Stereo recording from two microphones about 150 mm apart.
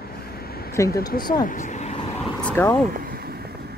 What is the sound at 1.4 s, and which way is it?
Speech, 60° left (ahead or behind).